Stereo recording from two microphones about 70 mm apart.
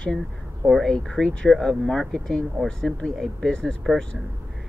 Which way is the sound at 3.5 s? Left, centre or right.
Centre.